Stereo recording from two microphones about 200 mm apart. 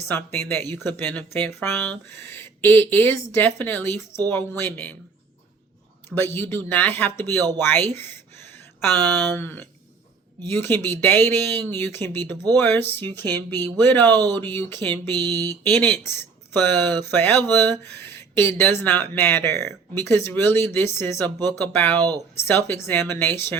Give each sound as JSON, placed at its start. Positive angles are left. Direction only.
{"t": 0.1, "sound": "speech", "side_deg": 10}
{"t": 6.1, "sound": "speech", "side_deg": 10}
{"t": 7.9, "sound": "a sound", "side_deg": 10}
{"t": 9.3, "sound": "speech", "side_deg": 10}
{"t": 15.1, "sound": "a sound", "side_deg": -20}
{"t": 15.4, "sound": "speech", "side_deg": 10}